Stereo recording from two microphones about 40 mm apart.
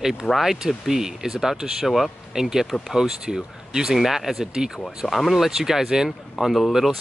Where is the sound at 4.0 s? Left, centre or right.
Centre.